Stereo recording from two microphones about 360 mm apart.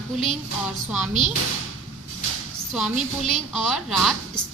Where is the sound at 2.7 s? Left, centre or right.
Centre.